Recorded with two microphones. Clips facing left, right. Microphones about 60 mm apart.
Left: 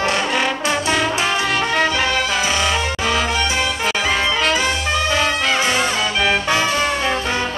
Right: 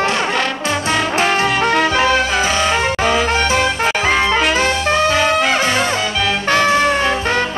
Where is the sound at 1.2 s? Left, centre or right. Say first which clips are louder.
Right 4 dB; right.